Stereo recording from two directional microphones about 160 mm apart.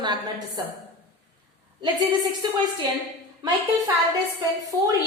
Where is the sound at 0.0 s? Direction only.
25° right (ahead or behind).